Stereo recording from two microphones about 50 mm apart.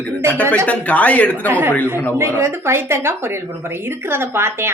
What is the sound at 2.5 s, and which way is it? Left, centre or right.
A woman's voice, right.